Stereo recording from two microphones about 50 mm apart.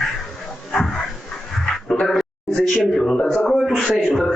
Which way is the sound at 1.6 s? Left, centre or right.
Centre.